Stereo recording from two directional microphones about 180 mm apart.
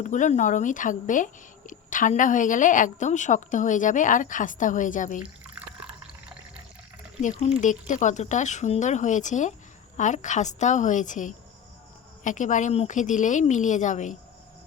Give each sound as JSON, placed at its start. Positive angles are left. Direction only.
{"t": 0.0, "sound": "speech", "side_deg": 40}
{"t": 5.2, "sound": "drip", "side_deg": -5}
{"t": 7.2, "sound": "speech", "side_deg": 40}